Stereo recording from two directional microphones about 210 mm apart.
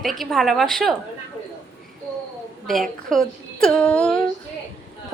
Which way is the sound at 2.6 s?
Centre (ahead or behind).